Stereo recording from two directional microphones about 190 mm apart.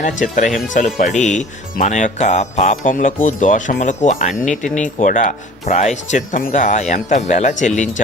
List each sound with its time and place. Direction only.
0.0 s speech: 40° left (ahead or behind)